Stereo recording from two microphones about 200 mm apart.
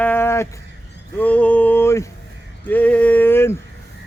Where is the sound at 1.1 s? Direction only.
5° left (ahead or behind).